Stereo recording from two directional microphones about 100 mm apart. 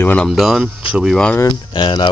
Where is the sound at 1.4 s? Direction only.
50° left (ahead or behind).